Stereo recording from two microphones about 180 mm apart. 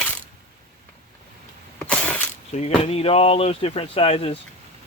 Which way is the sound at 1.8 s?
5° left (ahead or behind).